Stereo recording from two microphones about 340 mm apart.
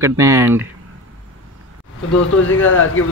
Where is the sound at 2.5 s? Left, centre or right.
Left.